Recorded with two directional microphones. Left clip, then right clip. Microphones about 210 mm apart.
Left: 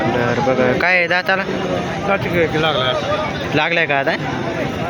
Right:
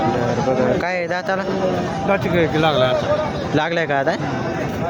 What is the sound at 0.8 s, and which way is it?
Speech, centre (ahead or behind).